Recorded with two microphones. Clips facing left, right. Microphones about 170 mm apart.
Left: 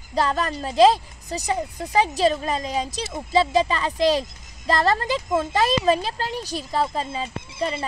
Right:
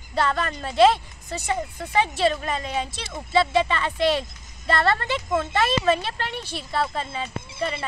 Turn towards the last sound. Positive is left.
turn(degrees=35)  # may be behind; listen again after turning